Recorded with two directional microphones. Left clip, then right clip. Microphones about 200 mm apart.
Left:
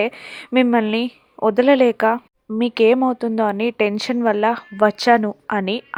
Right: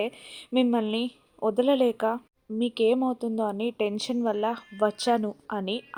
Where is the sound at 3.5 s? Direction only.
60° left (ahead or behind).